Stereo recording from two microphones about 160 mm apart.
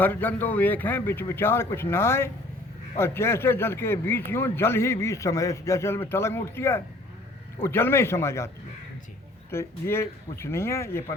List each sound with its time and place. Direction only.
0.0 s a man's voice: 10° left (ahead or behind)
9.5 s a man's voice: 15° left (ahead or behind)